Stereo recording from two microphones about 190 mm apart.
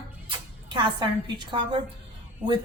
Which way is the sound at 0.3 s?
25° right (ahead or behind).